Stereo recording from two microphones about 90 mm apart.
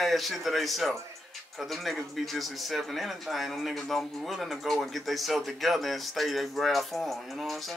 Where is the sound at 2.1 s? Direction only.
Centre (ahead or behind).